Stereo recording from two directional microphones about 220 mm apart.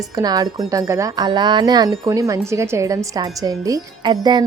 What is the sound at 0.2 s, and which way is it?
Speech, 15° right (ahead or behind).